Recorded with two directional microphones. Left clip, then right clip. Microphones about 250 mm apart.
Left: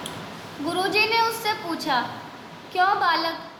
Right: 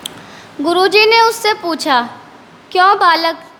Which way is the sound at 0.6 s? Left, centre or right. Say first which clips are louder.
Right 12 dB; right.